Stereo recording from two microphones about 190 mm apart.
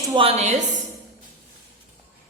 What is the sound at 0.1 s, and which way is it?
Speech, 30° right (ahead or behind).